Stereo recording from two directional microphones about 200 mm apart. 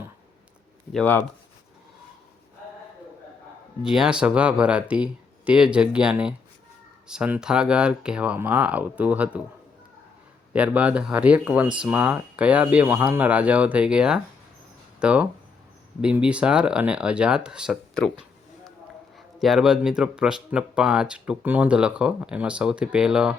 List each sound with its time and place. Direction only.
0.9 s speech: 10° left (ahead or behind)
3.8 s speech: 5° right (ahead or behind)
10.5 s speech: 5° right (ahead or behind)
19.1 s speech: centre (ahead or behind)